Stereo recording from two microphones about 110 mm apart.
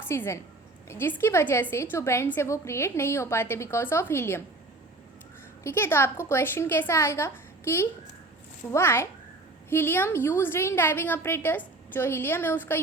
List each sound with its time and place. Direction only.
0.1 s a woman's voice: 25° left (ahead or behind)
5.6 s a woman's voice: 20° left (ahead or behind)